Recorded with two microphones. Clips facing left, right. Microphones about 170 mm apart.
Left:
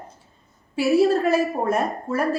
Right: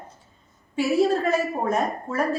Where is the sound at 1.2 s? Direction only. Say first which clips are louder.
Left 3 dB; 10° left (ahead or behind).